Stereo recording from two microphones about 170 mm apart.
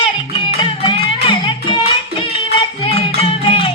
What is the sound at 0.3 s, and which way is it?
Music, 30° left (ahead or behind).